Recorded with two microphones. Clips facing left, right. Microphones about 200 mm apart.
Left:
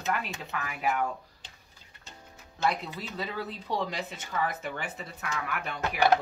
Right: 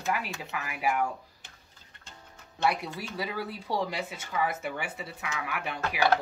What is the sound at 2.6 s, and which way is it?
Speech, 10° right (ahead or behind).